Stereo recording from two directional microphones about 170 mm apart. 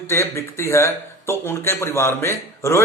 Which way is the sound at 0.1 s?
15° left (ahead or behind).